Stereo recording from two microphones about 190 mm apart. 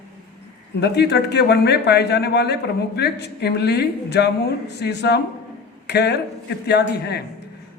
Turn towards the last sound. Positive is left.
turn(degrees=60)  # may be behind; listen again after turning